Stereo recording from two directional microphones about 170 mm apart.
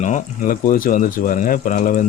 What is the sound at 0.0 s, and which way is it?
Speech, 50° left (ahead or behind).